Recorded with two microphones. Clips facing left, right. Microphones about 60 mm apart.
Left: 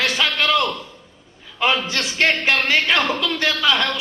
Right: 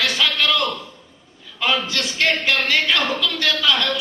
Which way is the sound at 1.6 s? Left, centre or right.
Left.